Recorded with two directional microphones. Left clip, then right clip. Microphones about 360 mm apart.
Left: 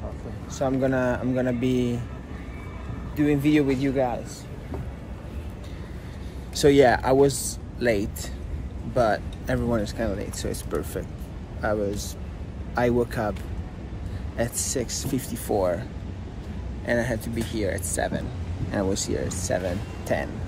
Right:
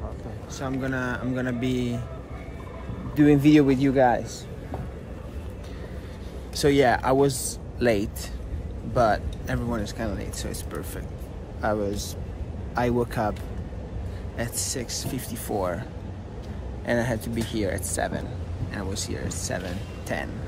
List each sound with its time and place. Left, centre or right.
0.6 s speech: centre
3.2 s speech: centre
6.5 s speech: centre
14.3 s speech: centre
16.8 s speech: centre
18.7 s speech: centre